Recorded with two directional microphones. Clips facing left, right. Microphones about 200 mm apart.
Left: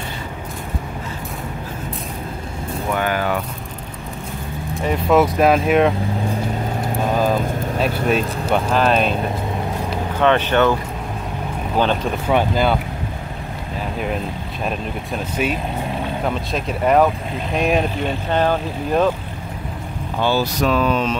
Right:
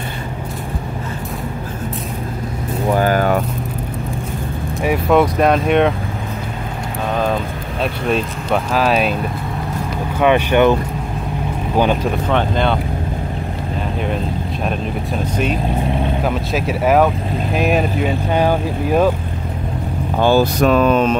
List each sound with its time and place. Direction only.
2.9 s vehicle: 40° right (ahead or behind)
5.1 s speech: 5° left (ahead or behind)
7.8 s speech: 5° left (ahead or behind)
10.2 s speech: 15° right (ahead or behind)
12.3 s speech: 5° left (ahead or behind)
16.3 s speech: 5° right (ahead or behind)
20.2 s speech: 50° right (ahead or behind)